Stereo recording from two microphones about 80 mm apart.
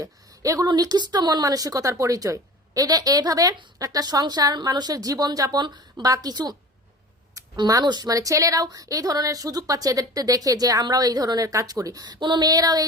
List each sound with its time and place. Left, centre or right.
0.0 s a sound: right
0.8 s a woman's voice: right
7.4 s a sound: right
7.7 s speech: right
12.0 s a woman's voice: right
12.5 s speech: right